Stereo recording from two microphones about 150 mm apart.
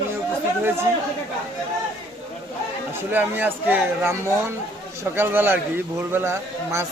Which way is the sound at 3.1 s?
15° right (ahead or behind).